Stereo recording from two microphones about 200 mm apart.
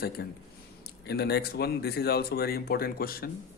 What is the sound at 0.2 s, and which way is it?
Speech, 50° left (ahead or behind).